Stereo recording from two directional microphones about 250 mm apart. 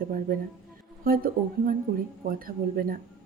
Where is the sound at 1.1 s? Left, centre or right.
Right.